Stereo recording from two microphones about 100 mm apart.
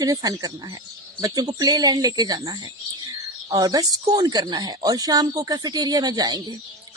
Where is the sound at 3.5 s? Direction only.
40° right (ahead or behind).